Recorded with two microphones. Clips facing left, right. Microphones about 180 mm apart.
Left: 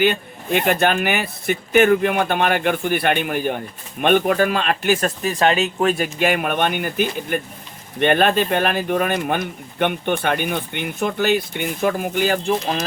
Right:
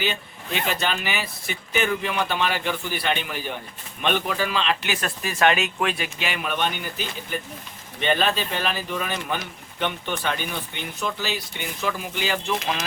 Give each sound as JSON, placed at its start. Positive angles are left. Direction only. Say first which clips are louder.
{"t": 0.0, "sound": "speech", "louder": "left 9 dB", "side_deg": 55}